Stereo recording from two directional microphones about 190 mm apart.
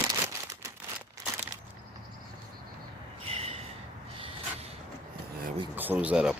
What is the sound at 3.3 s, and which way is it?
Snort, 30° right (ahead or behind).